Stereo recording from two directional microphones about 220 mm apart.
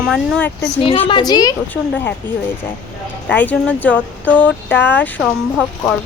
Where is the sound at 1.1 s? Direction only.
20° left (ahead or behind).